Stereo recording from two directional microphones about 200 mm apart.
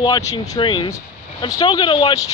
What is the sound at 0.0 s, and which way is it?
Speech, 20° left (ahead or behind).